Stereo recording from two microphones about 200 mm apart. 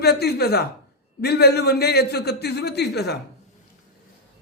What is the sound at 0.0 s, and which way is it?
A man's voice, 55° left (ahead or behind).